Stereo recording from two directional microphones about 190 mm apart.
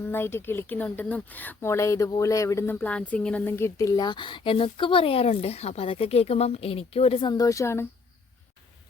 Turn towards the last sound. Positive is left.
turn(degrees=15)  # may be behind; listen again after turning